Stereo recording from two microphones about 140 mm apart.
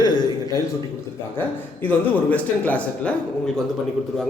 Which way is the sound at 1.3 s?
15° left (ahead or behind).